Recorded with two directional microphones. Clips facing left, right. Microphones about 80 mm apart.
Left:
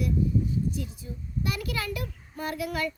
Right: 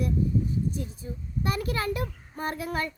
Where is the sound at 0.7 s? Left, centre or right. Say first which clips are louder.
Right 1 dB; right.